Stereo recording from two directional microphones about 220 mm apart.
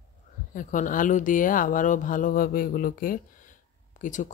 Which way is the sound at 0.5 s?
35° left (ahead or behind).